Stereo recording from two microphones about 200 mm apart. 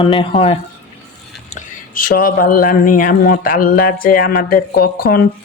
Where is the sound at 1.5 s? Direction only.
40° left (ahead or behind).